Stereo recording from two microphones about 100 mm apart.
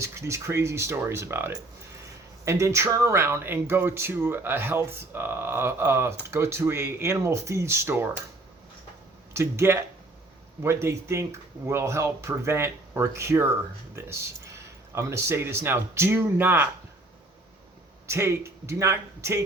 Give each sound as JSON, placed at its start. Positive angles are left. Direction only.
{"t": 0.0, "sound": "speech", "side_deg": -30}
{"t": 9.3, "sound": "speech", "side_deg": -25}
{"t": 18.0, "sound": "speech", "side_deg": -25}